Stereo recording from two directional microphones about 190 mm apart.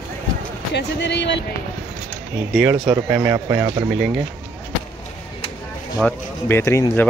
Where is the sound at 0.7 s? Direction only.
65° left (ahead or behind).